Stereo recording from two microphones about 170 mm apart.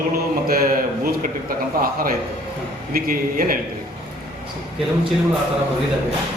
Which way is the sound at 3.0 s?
55° right (ahead or behind).